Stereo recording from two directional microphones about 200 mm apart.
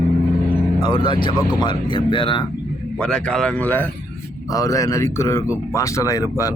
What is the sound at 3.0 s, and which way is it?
Speech, 5° left (ahead or behind).